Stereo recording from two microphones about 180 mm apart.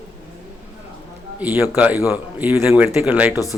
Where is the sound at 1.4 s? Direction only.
10° right (ahead or behind).